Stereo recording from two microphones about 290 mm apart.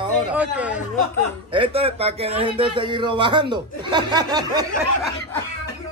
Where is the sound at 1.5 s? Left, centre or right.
Centre.